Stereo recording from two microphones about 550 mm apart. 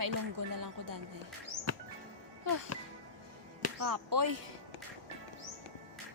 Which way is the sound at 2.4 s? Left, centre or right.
Right.